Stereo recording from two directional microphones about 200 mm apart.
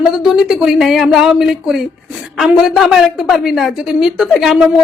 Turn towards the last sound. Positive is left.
turn(degrees=0)  # may be behind; listen again after turning